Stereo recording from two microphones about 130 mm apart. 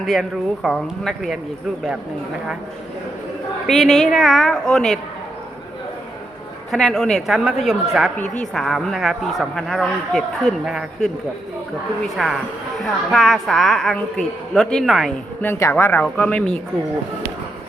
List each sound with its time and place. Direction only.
0.0 s speech: centre (ahead or behind)
3.7 s speech: centre (ahead or behind)
6.7 s speech: 5° left (ahead or behind)
8.2 s a woman's voice: 70° left (ahead or behind)
8.5 s speech: centre (ahead or behind)
12.1 s speech: 5° right (ahead or behind)
15.4 s speech: 20° left (ahead or behind)